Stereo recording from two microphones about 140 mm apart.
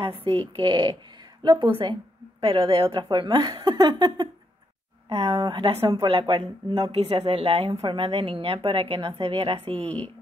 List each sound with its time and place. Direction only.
0.0 s a woman's voice: 40° right (ahead or behind)